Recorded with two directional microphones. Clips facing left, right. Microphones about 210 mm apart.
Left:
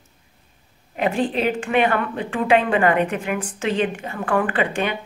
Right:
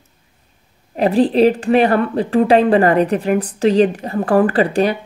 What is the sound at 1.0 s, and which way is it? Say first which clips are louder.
A woman's voice: right 9 dB; 35° right (ahead or behind).